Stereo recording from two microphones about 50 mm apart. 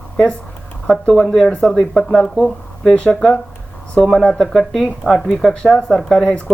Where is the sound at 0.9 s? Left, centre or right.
Centre.